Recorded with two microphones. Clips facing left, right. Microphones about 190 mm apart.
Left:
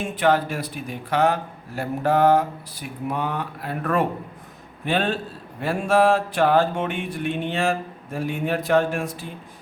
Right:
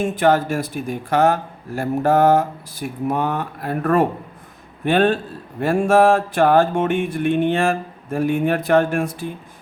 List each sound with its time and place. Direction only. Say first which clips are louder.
0.0 s speech: right 4 dB; 45° right (ahead or behind)